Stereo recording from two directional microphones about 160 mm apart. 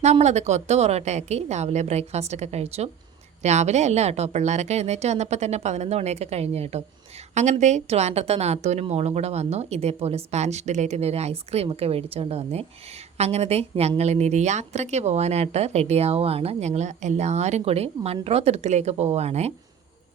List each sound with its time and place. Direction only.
0.0 s a woman's voice: 45° right (ahead or behind)